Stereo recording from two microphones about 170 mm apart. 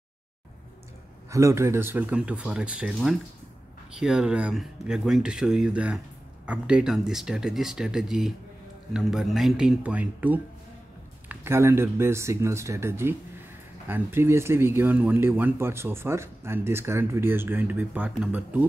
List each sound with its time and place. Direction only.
1.3 s speech: 15° right (ahead or behind)